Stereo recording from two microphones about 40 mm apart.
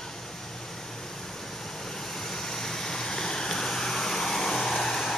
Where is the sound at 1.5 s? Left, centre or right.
Centre.